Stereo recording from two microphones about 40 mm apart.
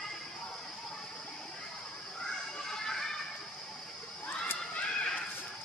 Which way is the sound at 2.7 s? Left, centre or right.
Centre.